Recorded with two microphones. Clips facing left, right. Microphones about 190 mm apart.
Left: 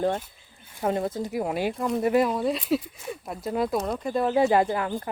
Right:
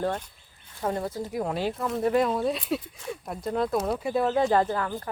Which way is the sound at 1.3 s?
5° left (ahead or behind).